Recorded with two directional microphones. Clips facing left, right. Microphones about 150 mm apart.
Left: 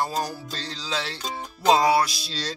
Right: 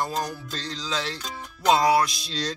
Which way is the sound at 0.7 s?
5° left (ahead or behind).